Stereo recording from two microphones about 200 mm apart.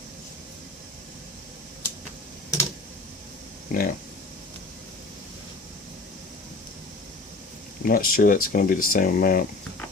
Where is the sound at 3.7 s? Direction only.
45° left (ahead or behind).